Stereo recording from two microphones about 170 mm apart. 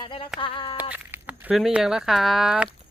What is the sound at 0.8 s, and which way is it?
Speech, 10° right (ahead or behind).